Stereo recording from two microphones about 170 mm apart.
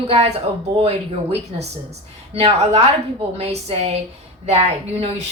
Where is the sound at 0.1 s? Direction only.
35° right (ahead or behind).